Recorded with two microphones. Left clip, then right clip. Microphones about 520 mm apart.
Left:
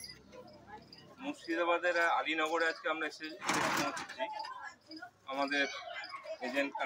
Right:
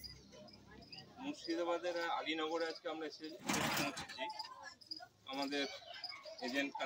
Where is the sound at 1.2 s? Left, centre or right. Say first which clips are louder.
Left 6 dB; right.